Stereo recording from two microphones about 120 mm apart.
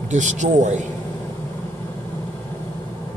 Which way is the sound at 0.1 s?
90° right.